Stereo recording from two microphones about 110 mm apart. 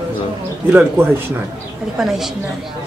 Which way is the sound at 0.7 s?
15° right (ahead or behind).